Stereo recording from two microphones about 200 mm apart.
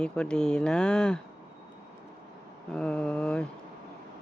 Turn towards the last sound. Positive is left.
turn(degrees=5)  # may be behind; listen again after turning